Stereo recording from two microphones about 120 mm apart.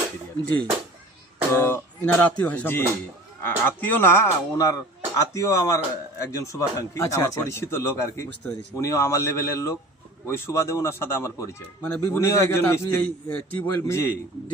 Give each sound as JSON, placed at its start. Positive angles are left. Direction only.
{"t": 1.5, "sound": "speech", "side_deg": 20}